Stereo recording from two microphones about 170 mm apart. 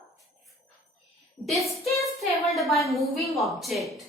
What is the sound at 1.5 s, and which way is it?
A woman's voice, centre (ahead or behind).